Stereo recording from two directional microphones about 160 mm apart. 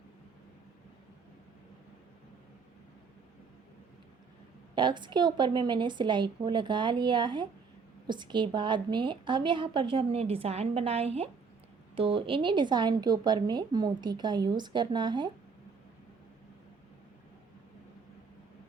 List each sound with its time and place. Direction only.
4.7 s a woman's voice: 30° right (ahead or behind)